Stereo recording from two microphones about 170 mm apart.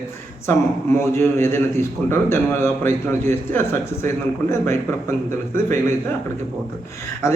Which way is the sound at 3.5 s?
15° left (ahead or behind).